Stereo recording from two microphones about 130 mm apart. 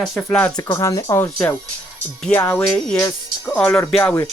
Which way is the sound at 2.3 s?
10° left (ahead or behind).